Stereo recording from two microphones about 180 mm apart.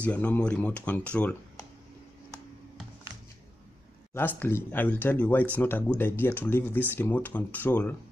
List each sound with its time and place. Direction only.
0.0 s speech: 10° left (ahead or behind)
4.4 s speech: 10° left (ahead or behind)